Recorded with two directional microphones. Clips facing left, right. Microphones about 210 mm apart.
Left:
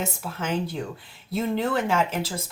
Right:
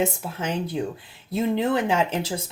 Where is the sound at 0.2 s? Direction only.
20° right (ahead or behind).